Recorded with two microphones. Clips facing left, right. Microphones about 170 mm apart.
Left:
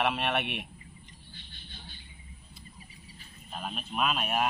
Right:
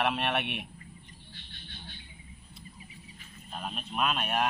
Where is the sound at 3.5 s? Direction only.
Centre (ahead or behind).